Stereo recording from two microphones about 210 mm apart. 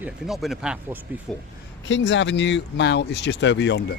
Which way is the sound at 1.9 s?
60° left (ahead or behind).